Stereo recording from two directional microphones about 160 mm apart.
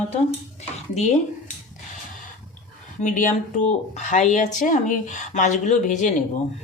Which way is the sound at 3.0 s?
55° left (ahead or behind).